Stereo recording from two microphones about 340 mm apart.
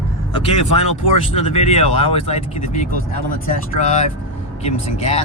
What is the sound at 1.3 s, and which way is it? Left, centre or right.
Speech, centre.